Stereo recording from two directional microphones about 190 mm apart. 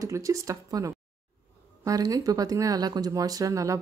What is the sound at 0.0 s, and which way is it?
Speech, 15° right (ahead or behind).